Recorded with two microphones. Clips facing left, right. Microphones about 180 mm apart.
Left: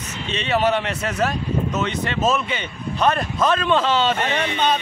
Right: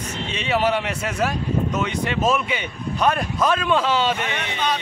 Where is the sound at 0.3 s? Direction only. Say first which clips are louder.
Left 2 dB; 10° right (ahead or behind).